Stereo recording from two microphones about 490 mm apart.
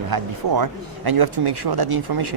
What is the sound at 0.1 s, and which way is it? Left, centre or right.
Speech, right.